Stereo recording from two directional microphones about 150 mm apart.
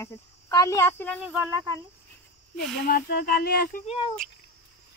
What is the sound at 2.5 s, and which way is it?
Speech, 90° left.